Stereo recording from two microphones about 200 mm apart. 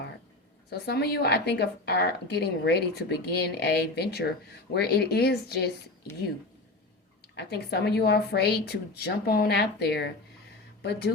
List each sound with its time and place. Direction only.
0.7 s a woman's voice: 50° left (ahead or behind)
7.3 s a woman's voice: 55° left (ahead or behind)